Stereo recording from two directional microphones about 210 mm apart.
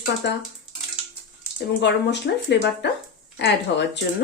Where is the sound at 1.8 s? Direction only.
55° left (ahead or behind).